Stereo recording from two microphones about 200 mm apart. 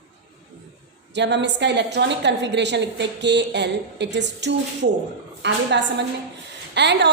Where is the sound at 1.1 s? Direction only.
60° right (ahead or behind).